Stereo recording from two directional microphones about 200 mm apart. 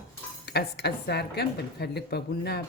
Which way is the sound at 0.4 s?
55° left (ahead or behind).